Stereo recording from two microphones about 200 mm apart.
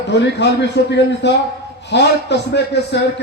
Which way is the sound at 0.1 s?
60° left (ahead or behind).